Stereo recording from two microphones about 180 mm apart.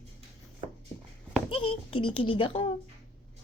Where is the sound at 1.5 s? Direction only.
30° left (ahead or behind).